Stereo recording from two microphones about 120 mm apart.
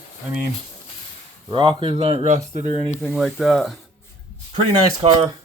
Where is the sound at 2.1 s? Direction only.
70° right (ahead or behind).